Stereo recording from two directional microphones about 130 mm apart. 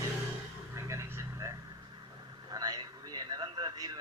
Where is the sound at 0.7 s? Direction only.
20° right (ahead or behind).